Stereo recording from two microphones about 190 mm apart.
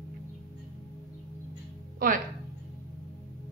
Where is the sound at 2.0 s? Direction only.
45° right (ahead or behind).